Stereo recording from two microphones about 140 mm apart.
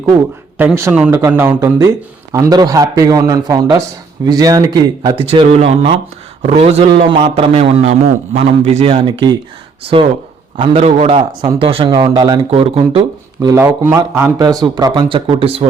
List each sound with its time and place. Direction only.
0.5 s a man's voice: 15° right (ahead or behind)
5.3 s a man's voice: 45° right (ahead or behind)
8.8 s a man's voice: 35° right (ahead or behind)
12.5 s a man's voice: 45° right (ahead or behind)
13.4 s a man's voice: 20° right (ahead or behind); by 15.6 s 40° right (ahead or behind)